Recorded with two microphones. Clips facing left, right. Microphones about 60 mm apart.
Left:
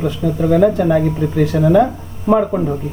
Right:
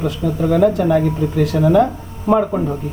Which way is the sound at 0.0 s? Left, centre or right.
Centre.